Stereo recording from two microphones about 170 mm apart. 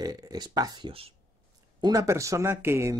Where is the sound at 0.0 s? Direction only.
20° right (ahead or behind).